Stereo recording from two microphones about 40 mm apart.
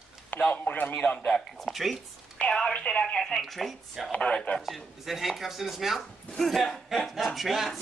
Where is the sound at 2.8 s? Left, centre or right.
Left.